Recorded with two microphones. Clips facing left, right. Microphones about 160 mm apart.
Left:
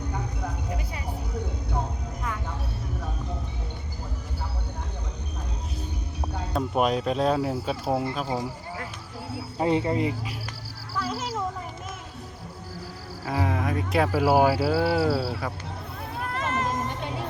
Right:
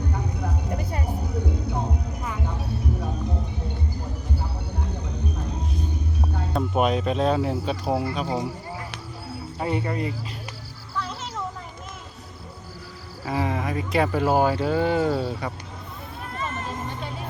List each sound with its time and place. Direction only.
6.5 s speech: centre (ahead or behind)
9.6 s speech: 25° left (ahead or behind)
10.9 s music: 5° left (ahead or behind)
13.2 s speech: centre (ahead or behind)
16.3 s a sound: 80° left